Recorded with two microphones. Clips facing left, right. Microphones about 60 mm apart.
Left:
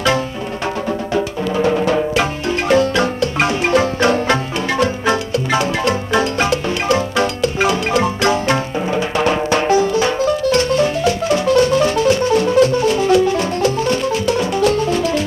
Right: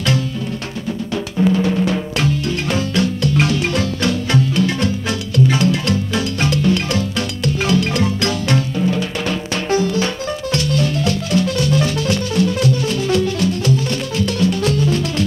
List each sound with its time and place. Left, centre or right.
1.1 s music: left
3.2 s music: left
14.1 s music: centre